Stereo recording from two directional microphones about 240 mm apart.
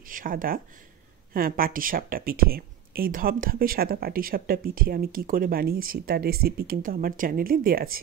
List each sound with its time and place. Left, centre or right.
0.1 s speech: right